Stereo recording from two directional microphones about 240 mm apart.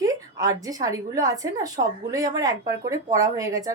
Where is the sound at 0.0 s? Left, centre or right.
Centre.